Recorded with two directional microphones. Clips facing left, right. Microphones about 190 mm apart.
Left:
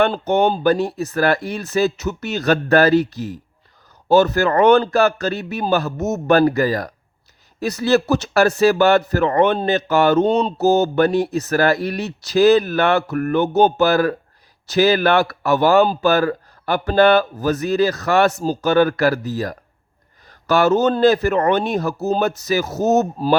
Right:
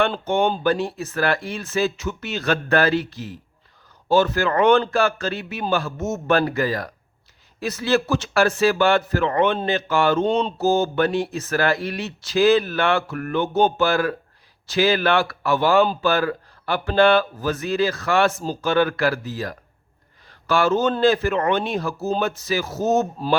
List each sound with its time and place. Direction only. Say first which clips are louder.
0.0 s a man's voice: left 4 dB; 40° left (ahead or behind)